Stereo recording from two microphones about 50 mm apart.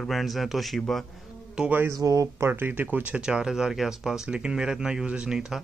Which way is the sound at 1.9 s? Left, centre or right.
Right.